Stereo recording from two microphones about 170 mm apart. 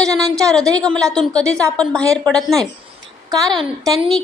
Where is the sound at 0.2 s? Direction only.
20° right (ahead or behind).